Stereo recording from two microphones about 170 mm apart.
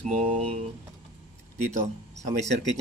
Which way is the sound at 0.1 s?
45° right (ahead or behind).